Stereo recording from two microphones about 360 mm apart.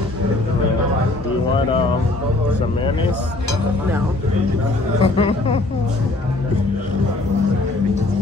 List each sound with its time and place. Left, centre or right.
5.0 s speech: centre